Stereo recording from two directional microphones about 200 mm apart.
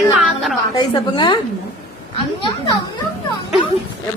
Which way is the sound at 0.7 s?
20° left (ahead or behind).